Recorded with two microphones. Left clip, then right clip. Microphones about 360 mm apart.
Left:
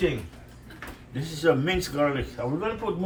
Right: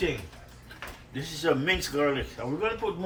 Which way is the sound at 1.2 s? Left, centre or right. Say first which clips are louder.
Left 4 dB; right.